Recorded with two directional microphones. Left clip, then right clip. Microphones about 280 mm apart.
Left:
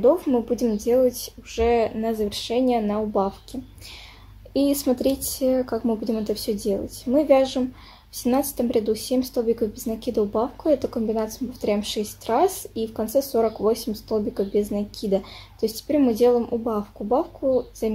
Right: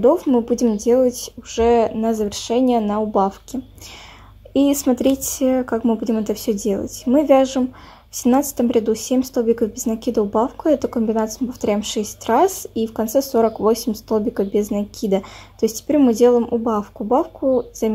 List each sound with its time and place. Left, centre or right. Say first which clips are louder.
0.0 s speech: right 4 dB; centre
4.6 s speech: right 4 dB; right